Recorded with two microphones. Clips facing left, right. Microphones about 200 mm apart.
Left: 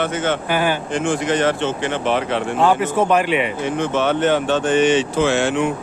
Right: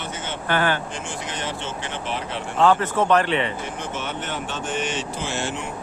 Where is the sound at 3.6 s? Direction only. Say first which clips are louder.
Left 11 dB; 80° left.